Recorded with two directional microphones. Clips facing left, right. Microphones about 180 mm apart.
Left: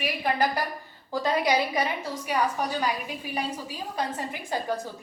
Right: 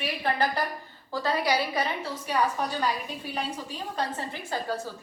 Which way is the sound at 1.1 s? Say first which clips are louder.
Left 2 dB; 15° left (ahead or behind).